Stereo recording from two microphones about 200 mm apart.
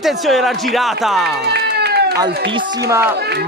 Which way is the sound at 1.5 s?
55° right (ahead or behind).